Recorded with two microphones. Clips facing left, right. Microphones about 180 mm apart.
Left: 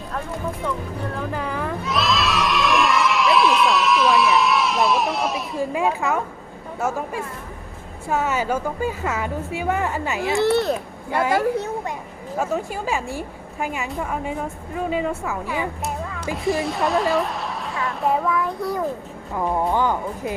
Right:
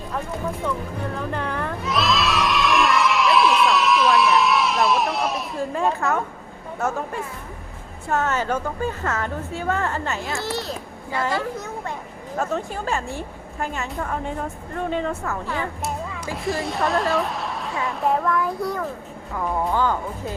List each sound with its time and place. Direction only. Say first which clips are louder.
1.3 s crowd: left 1 dB; 5° left (ahead or behind)
5.7 s a woman's voice: even; 10° left (ahead or behind)
10.4 s a child's voice: left 9 dB; 60° left (ahead or behind)
12.4 s a woman's voice: left 1 dB; 10° left (ahead or behind)
16.3 s a child's voice: left 3 dB; centre (ahead or behind)
19.3 s a woman's voice: left 2 dB; 20° left (ahead or behind)